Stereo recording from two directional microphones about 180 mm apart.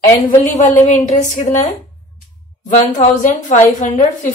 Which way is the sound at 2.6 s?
40° left (ahead or behind).